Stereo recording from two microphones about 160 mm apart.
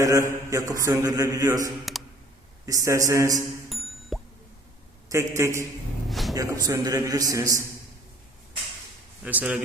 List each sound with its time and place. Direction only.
0.0 s a man's voice: 20° right (ahead or behind)
1.8 s a sound: centre (ahead or behind)
2.6 s a man's voice: 20° right (ahead or behind)
3.7 s music: centre (ahead or behind)
5.0 s a man's voice: 20° right (ahead or behind)
6.1 s a sound: centre (ahead or behind)
6.7 s a man's voice: 20° right (ahead or behind)
9.2 s a man's voice: 10° right (ahead or behind)